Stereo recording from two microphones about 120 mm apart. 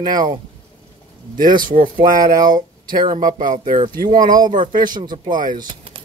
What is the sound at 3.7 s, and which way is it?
Speech, 45° right (ahead or behind).